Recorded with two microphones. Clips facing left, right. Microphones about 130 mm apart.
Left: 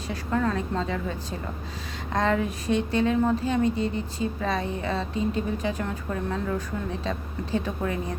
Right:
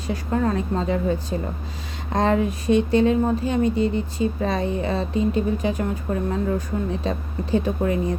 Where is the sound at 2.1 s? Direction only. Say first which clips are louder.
Right 4 dB; 20° right (ahead or behind).